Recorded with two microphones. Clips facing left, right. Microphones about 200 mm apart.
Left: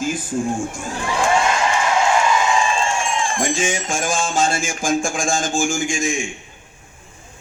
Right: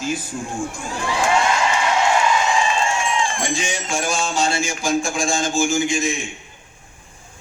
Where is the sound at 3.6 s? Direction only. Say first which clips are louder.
Left 2 dB; 50° left (ahead or behind).